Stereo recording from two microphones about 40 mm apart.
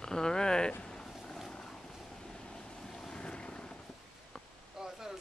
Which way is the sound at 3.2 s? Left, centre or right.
Left.